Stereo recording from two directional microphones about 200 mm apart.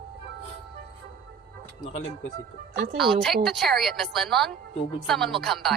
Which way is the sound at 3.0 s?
Centre (ahead or behind).